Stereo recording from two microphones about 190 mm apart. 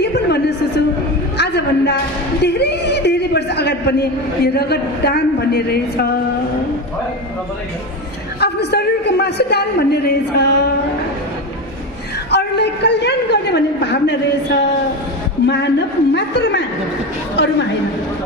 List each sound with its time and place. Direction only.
0.0 s a sound: 60° left (ahead or behind)
1.4 s a woman's voice: 60° left (ahead or behind)
2.4 s a sound: 60° left (ahead or behind)
4.6 s a man's voice: 60° left (ahead or behind)
8.4 s a man's voice: 60° left (ahead or behind)
12.3 s a man's voice: 60° left (ahead or behind)